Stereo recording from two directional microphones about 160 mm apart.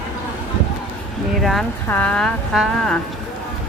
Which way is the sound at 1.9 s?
10° left (ahead or behind).